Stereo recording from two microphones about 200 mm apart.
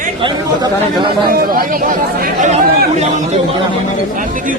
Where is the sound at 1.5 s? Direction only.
45° right (ahead or behind).